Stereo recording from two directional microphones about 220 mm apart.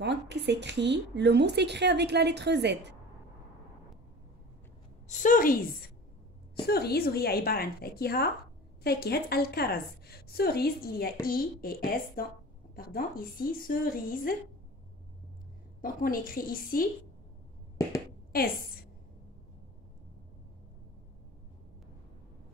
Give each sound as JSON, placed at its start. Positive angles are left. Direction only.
{"t": 0.0, "sound": "speech", "side_deg": -50}
{"t": 5.0, "sound": "a woman's voice", "side_deg": 35}
{"t": 6.6, "sound": "a woman's voice", "side_deg": 45}
{"t": 15.8, "sound": "a woman's voice", "side_deg": 40}
{"t": 18.3, "sound": "a woman's voice", "side_deg": 40}